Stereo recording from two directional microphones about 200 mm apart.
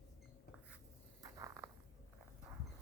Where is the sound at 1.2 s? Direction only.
15° right (ahead or behind).